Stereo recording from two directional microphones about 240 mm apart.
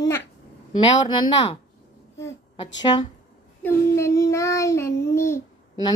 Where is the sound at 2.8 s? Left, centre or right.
Centre.